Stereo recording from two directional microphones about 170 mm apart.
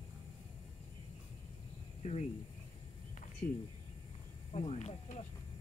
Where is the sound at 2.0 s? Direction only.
40° left (ahead or behind).